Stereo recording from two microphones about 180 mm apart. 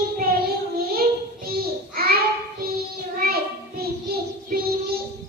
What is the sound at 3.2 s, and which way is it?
Child singing, 60° right (ahead or behind).